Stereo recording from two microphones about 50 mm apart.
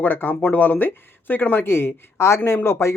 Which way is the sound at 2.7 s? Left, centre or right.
Left.